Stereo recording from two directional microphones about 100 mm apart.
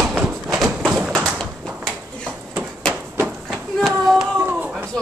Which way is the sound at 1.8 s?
Centre (ahead or behind).